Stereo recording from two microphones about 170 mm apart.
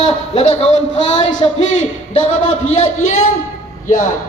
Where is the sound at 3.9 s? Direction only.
50° left (ahead or behind).